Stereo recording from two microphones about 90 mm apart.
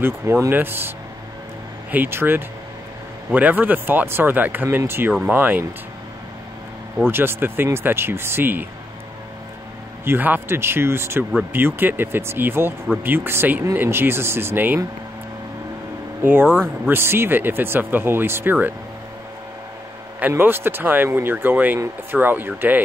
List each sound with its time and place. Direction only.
0.0 s speech: 25° right (ahead or behind)
7.1 s speech: 25° right (ahead or behind)
10.0 s speech: 20° right (ahead or behind)
16.2 s speech: 20° right (ahead or behind)
20.2 s speech: 20° right (ahead or behind)